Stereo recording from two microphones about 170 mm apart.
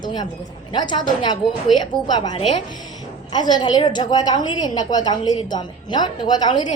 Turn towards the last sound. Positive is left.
turn(degrees=25)  # may be behind; listen again after turning